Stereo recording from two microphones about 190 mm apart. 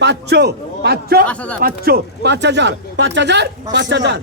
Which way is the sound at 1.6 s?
55° right (ahead or behind).